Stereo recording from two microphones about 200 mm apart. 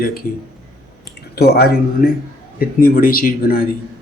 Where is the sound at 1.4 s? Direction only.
55° left (ahead or behind).